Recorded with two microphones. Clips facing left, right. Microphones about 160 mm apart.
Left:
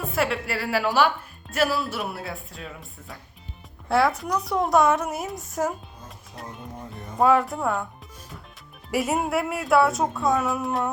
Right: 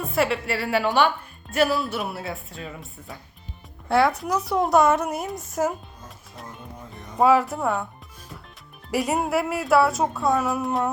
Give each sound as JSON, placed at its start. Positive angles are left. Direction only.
{"t": 0.0, "sound": "a woman's voice", "side_deg": 0}
{"t": 7.2, "sound": "a woman's voice", "side_deg": 0}
{"t": 8.9, "sound": "a woman's voice", "side_deg": 0}